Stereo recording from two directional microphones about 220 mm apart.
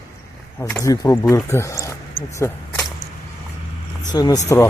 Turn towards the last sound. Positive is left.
turn(degrees=15)  # may be behind; listen again after turning